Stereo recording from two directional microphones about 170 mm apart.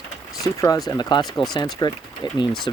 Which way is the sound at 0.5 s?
20° left (ahead or behind).